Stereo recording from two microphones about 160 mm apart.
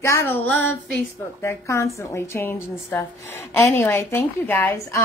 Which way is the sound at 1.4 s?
20° left (ahead or behind).